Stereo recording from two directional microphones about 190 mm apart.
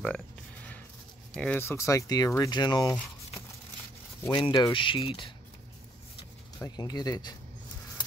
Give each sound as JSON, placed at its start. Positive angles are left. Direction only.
{"t": 1.3, "sound": "speech", "side_deg": 5}
{"t": 4.3, "sound": "speech", "side_deg": 25}
{"t": 6.6, "sound": "speech", "side_deg": 20}